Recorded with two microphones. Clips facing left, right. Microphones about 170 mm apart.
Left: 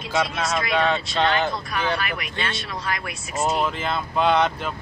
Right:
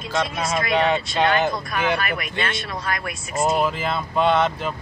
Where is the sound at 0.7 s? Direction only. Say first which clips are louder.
Right 2 dB; 15° right (ahead or behind).